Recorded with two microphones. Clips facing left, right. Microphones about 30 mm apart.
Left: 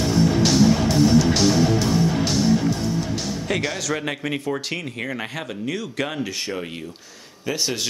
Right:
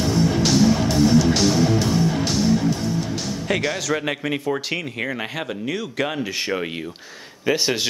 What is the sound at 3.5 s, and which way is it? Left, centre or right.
Speech, centre.